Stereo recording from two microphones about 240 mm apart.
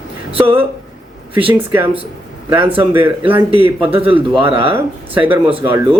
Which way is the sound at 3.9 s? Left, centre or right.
Right.